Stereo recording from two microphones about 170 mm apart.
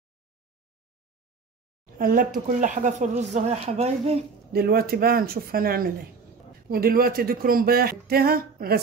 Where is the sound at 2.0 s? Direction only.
55° right (ahead or behind); by 4.2 s 35° right (ahead or behind).